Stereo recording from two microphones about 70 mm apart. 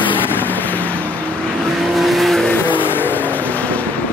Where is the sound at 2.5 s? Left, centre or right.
Left.